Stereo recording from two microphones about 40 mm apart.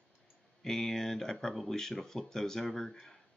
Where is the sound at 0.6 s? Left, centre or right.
Centre.